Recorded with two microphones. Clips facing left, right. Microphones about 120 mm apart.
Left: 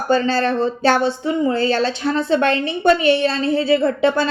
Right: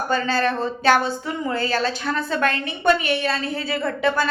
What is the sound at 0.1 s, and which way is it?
Speech, 35° left (ahead or behind).